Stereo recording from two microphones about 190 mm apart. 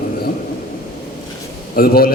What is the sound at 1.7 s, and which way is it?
Speech, 50° left (ahead or behind).